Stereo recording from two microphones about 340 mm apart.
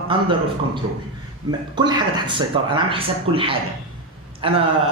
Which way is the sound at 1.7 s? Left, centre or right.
Centre.